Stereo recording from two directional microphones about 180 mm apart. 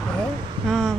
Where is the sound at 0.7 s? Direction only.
Centre (ahead or behind).